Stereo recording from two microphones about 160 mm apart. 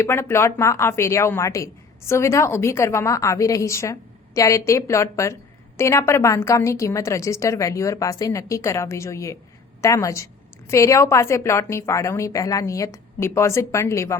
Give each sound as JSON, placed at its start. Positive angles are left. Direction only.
{"t": 0.0, "sound": "a woman's voice", "side_deg": 15}